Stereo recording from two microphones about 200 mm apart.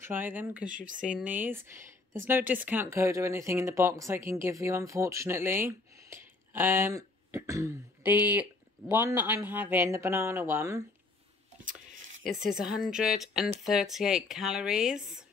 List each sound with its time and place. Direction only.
0.0 s speech: 10° right (ahead or behind)
0.7 s speech: 40° right (ahead or behind)
1.0 s speech: 5° right (ahead or behind)
11.6 s a sound: 40° right (ahead or behind)
12.4 s speech: centre (ahead or behind)